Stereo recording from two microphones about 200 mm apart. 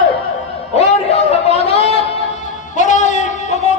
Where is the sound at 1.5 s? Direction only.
30° left (ahead or behind).